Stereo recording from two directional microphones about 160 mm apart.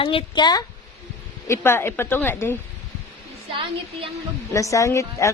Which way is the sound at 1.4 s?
15° left (ahead or behind).